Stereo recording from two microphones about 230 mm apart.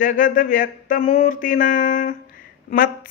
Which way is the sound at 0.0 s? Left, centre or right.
Left.